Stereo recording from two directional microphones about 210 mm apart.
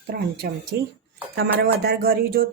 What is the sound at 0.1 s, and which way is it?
Speech, 45° right (ahead or behind).